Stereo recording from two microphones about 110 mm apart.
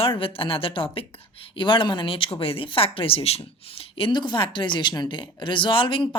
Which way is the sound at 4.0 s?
45° left (ahead or behind).